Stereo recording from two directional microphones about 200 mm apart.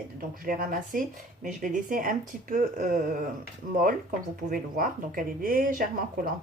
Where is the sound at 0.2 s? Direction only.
45° right (ahead or behind).